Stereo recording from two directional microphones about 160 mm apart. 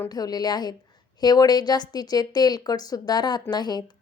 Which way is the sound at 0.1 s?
25° left (ahead or behind).